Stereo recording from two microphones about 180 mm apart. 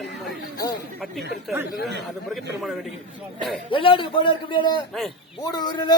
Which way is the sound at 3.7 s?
30° left (ahead or behind).